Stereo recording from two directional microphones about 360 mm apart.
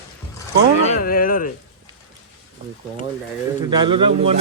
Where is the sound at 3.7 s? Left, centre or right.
Centre.